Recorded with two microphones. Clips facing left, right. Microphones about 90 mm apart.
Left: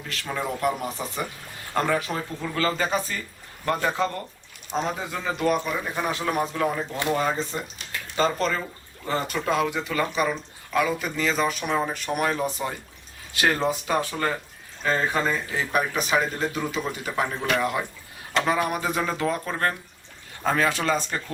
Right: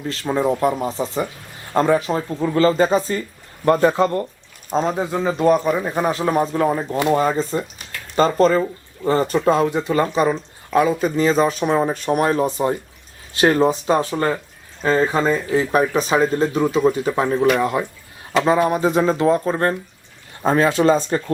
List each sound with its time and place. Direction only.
0.1 s speech: 30° right (ahead or behind)